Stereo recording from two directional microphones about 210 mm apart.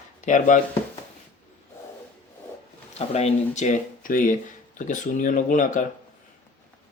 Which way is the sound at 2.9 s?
30° left (ahead or behind).